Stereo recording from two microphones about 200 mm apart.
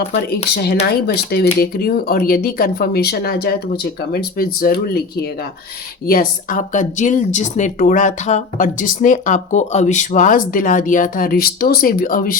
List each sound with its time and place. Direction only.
0.5 s speech: 55° left (ahead or behind)
6.1 s speech: 45° left (ahead or behind)